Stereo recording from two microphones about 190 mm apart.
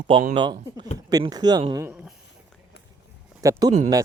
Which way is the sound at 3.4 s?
20° right (ahead or behind).